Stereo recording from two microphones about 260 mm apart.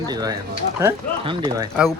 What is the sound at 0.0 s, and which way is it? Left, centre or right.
Speech, centre.